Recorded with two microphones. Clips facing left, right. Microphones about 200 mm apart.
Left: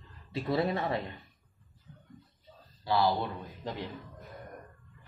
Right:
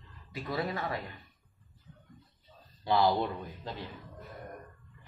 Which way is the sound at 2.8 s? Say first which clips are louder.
Right 1 dB; 20° right (ahead or behind).